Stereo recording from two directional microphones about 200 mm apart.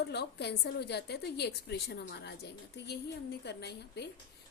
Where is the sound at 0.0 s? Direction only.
55° left (ahead or behind).